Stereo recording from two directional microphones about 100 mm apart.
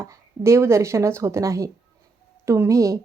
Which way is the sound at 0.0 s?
30° right (ahead or behind).